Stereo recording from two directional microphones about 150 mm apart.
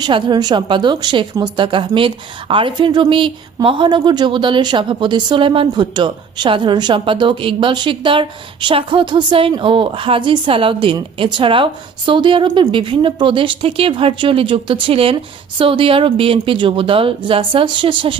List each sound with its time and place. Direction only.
0.0 s a woman's voice: 30° right (ahead or behind)